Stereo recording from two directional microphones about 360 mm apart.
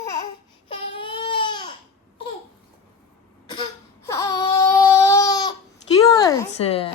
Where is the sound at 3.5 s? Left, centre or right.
Centre.